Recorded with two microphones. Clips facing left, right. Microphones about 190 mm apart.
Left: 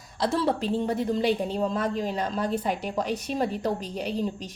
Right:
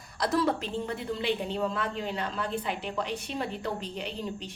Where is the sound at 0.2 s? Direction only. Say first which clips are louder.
Left 2 dB; 30° left (ahead or behind).